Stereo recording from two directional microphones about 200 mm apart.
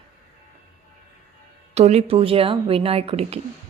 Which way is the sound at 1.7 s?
35° right (ahead or behind).